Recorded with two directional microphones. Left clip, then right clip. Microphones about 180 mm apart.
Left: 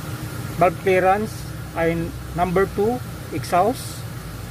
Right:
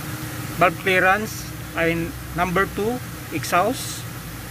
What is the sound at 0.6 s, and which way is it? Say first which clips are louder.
Speech: even; 10° left (ahead or behind).